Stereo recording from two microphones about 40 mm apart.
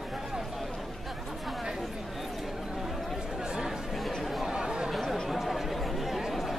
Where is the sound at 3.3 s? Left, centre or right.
Centre.